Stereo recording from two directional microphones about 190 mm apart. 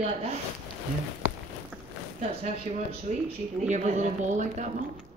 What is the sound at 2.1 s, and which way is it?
Speech, 40° right (ahead or behind).